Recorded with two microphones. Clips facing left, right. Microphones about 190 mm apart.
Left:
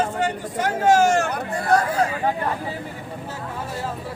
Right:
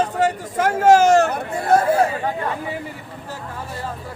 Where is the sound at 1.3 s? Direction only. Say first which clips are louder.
Right 2 dB; 25° right (ahead or behind).